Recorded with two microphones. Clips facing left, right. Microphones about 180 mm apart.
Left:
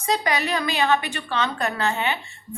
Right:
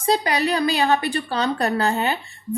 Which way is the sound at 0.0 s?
35° right (ahead or behind).